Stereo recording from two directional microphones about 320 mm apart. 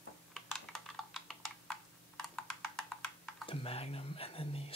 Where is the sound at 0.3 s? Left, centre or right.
Centre.